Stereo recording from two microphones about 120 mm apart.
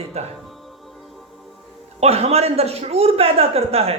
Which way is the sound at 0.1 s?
60° right (ahead or behind).